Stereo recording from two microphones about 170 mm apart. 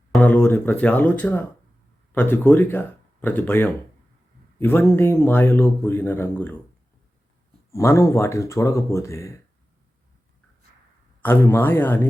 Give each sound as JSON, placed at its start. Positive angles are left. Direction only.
{"t": 0.1, "sound": "speech", "side_deg": 5}
{"t": 7.7, "sound": "speech", "side_deg": 15}
{"t": 11.2, "sound": "speech", "side_deg": 10}